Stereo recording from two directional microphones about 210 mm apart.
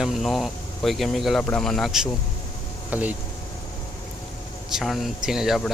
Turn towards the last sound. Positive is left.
turn(degrees=0)  # may be behind; listen again after turning